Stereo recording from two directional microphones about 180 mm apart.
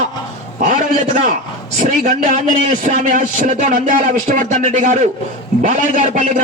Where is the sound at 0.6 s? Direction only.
45° right (ahead or behind).